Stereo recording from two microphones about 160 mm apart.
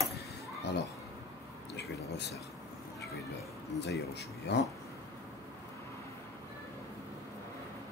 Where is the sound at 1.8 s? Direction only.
90° left.